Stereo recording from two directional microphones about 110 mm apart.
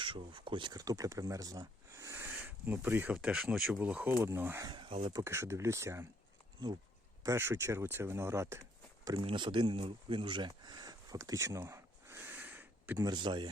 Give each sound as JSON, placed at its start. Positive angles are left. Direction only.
{"t": 0.0, "sound": "speech", "side_deg": -50}
{"t": 3.4, "sound": "speech", "side_deg": 0}
{"t": 3.8, "sound": "speech", "side_deg": -15}
{"t": 4.1, "sound": "speech", "side_deg": -25}
{"t": 4.7, "sound": "speech", "side_deg": -45}
{"t": 5.1, "sound": "speech", "side_deg": -25}
{"t": 7.2, "sound": "speech", "side_deg": -25}
{"t": 9.2, "sound": "speech", "side_deg": -45}
{"t": 13.0, "sound": "speech", "side_deg": -40}